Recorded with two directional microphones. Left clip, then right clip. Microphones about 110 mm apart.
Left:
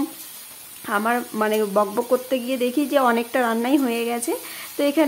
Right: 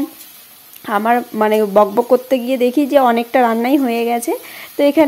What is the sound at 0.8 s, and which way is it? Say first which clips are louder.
Speech: right 7 dB; 40° right (ahead or behind).